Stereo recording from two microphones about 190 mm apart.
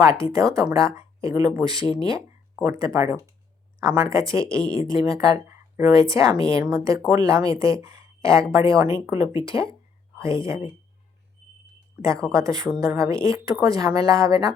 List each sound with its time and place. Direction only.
0.0 s speech: 15° right (ahead or behind)
12.3 s speech: 15° right (ahead or behind)